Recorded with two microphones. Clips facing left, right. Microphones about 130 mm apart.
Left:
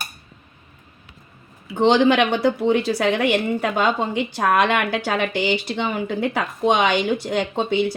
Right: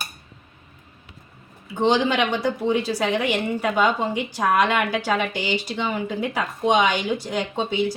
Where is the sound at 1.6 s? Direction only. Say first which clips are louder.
Left 4 dB; 65° left (ahead or behind).